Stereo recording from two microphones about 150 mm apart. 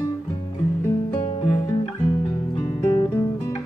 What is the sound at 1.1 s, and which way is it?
Music, 40° left (ahead or behind).